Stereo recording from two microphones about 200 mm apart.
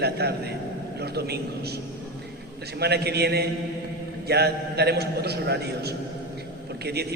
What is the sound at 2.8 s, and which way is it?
A man's voice, 55° right (ahead or behind).